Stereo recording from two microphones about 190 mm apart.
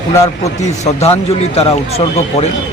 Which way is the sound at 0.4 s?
35° left (ahead or behind).